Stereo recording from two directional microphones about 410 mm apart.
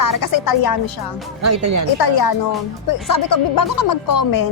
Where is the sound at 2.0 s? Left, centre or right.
Left.